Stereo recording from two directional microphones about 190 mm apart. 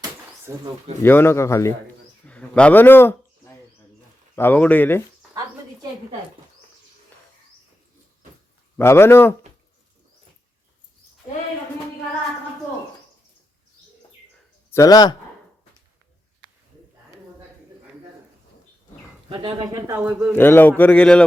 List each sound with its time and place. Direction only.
1.0 s a man's voice: 10° left (ahead or behind)
2.2 s a sound: 5° left (ahead or behind)
4.4 s a man's voice: 10° left (ahead or behind)
8.8 s a man's voice: 15° left (ahead or behind)
14.7 s speech: 15° left (ahead or behind)
19.3 s speech: 25° right (ahead or behind); by 20.3 s 10° right (ahead or behind)
20.3 s a man's voice: 10° left (ahead or behind)